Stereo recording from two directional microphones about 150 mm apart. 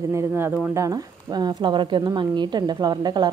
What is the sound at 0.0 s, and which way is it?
A woman's voice, 20° right (ahead or behind).